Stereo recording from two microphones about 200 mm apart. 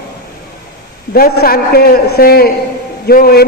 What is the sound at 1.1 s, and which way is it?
A man's voice, 50° left (ahead or behind).